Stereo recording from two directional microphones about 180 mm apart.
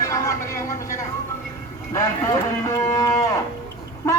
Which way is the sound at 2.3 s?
20° left (ahead or behind).